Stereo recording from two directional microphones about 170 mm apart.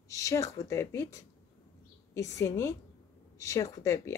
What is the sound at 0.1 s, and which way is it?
A woman's voice, 20° left (ahead or behind).